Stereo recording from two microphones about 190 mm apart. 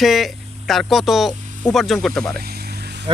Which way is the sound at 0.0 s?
Centre (ahead or behind).